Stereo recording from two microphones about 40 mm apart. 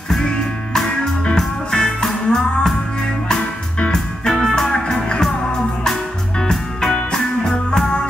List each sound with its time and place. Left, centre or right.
1.2 s music: centre
3.9 s music: centre
6.4 s music: centre